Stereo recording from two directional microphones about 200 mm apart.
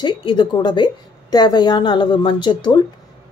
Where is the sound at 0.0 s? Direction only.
25° left (ahead or behind).